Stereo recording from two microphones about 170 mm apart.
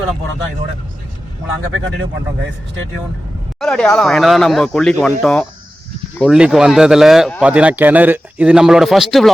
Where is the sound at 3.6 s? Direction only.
5° left (ahead or behind).